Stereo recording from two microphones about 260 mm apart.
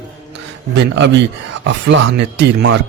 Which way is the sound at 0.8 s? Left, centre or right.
Right.